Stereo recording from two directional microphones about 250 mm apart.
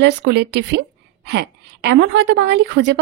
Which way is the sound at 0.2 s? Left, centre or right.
Right.